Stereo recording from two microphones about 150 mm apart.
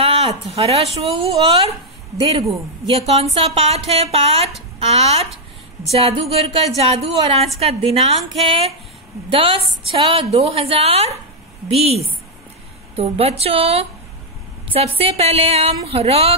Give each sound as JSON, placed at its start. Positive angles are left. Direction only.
{"t": 0.0, "sound": "a woman's voice", "side_deg": -40}
{"t": 2.9, "sound": "a woman's voice", "side_deg": -45}
{"t": 15.0, "sound": "a woman's voice", "side_deg": -40}